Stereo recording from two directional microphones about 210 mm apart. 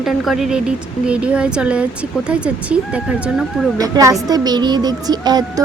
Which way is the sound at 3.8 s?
15° right (ahead or behind).